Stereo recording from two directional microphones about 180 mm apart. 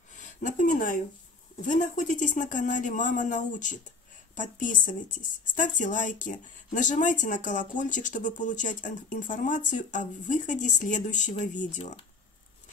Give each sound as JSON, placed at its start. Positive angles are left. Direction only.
{"t": 0.1, "sound": "speech", "side_deg": 45}